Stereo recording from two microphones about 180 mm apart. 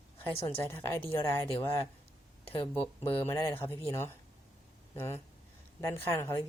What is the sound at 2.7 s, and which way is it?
Speech, 15° left (ahead or behind).